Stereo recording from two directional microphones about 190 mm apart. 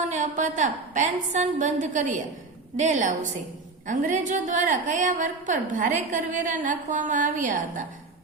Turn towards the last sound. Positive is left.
turn(degrees=-40)  # may be behind; listen again after turning